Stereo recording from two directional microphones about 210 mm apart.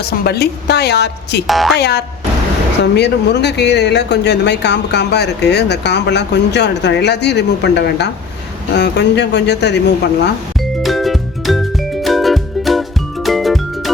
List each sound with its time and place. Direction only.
0.0 s speech: 50° left (ahead or behind)
1.5 s speech: centre (ahead or behind)
1.7 s speech: 50° left (ahead or behind)
10.8 s music: centre (ahead or behind)